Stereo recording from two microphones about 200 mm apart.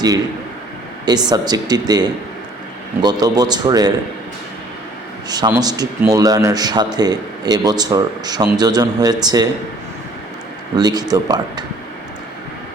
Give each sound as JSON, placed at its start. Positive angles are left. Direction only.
{"t": 1.0, "sound": "speech", "side_deg": -20}
{"t": 5.3, "sound": "speech", "side_deg": -20}
{"t": 10.8, "sound": "speech", "side_deg": -20}